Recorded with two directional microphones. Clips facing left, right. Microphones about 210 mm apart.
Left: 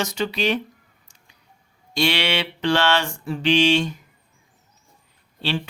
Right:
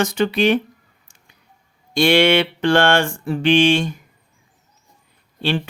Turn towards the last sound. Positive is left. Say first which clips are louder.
# right 4 dB
turn(degrees=-55)  # may be behind; listen again after turning